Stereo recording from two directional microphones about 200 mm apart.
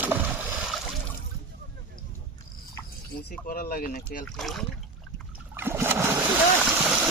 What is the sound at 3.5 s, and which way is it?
Speech, 45° left (ahead or behind).